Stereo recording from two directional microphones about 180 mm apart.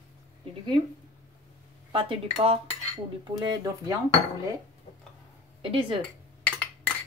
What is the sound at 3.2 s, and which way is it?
Speech, 25° right (ahead or behind).